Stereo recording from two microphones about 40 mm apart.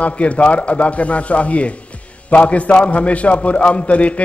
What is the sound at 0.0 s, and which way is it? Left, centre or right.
A man's voice, left.